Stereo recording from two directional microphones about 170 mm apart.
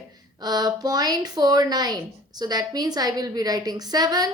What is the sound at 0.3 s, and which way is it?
A woman's voice, 25° right (ahead or behind).